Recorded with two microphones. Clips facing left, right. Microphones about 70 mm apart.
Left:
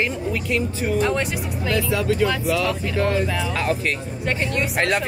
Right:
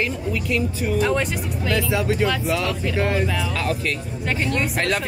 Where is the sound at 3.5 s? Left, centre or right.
Left.